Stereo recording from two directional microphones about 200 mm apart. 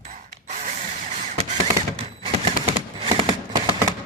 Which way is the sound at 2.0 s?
25° right (ahead or behind).